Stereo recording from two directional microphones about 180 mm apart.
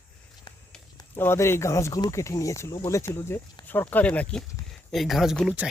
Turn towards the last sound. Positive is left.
turn(degrees=-5)  # may be behind; listen again after turning